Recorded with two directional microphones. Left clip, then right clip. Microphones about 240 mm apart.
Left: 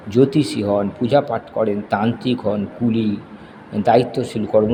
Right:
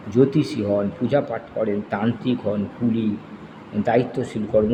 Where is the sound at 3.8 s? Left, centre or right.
Centre.